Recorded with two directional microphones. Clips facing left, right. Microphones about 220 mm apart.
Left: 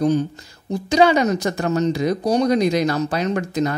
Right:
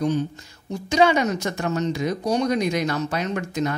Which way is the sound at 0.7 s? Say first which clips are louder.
Left 3 dB; 35° left (ahead or behind).